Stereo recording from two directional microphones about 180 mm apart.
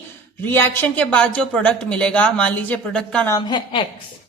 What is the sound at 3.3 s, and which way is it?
Speech, 25° left (ahead or behind).